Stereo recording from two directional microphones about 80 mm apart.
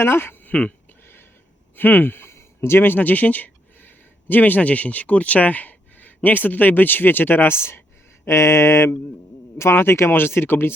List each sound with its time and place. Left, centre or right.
0.0 s speech: left
1.7 s speech: left